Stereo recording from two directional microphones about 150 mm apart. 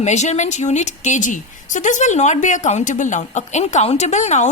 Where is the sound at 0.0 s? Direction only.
50° left (ahead or behind).